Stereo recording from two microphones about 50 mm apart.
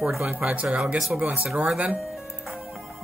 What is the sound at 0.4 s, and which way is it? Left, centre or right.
Speech, right.